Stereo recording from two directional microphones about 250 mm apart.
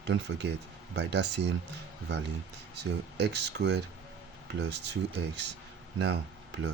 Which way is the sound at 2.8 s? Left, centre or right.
Right.